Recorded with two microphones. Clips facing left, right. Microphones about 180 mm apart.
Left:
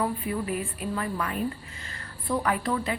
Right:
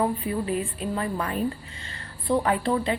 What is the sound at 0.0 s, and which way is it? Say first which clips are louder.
A woman's voice: right 3 dB; 25° right (ahead or behind).